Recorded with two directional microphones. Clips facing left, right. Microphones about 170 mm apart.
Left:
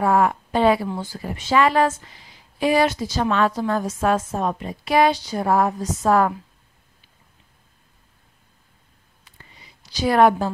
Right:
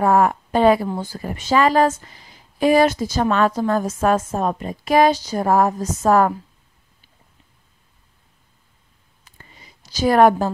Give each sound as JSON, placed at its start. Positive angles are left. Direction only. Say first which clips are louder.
{"t": 0.0, "sound": "a woman's voice", "louder": "right 2 dB", "side_deg": -45}
{"t": 9.8, "sound": "a woman's voice", "louder": "right 2 dB", "side_deg": -45}